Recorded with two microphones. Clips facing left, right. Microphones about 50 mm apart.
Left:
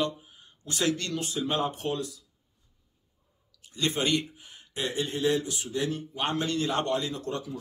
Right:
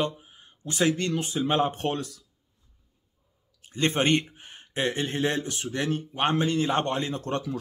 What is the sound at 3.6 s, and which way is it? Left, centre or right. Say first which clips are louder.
Speech: right 4 dB; right.